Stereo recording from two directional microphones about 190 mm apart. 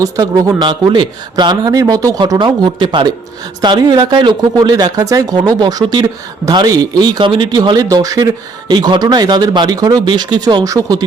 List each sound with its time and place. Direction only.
0.0 s speech: 20° right (ahead or behind)